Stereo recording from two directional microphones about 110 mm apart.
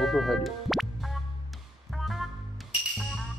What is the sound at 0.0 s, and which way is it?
Music, centre (ahead or behind).